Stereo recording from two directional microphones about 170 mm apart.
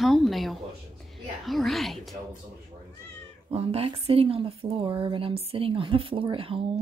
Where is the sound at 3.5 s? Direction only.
35° right (ahead or behind).